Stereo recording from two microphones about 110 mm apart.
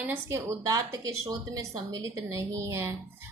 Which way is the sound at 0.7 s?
30° right (ahead or behind).